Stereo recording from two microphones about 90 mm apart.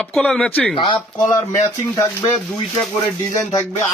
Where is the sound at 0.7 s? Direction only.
70° left (ahead or behind).